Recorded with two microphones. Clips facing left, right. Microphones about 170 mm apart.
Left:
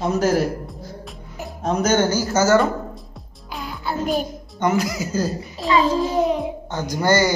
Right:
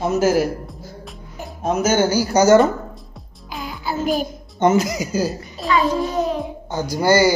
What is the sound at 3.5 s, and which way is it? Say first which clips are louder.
Music: right 1 dB; centre (ahead or behind).